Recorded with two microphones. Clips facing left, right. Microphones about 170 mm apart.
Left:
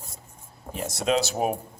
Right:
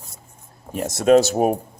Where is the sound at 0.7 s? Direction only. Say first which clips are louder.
Right 10 dB; 50° right (ahead or behind).